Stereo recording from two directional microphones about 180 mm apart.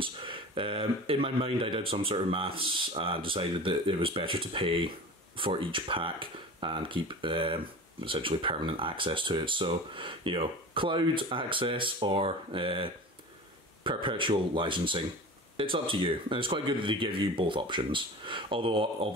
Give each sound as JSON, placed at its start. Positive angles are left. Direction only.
{"t": 0.0, "sound": "speech", "side_deg": -30}